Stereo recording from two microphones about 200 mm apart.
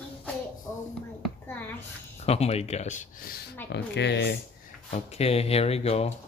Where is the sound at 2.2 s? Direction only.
30° left (ahead or behind).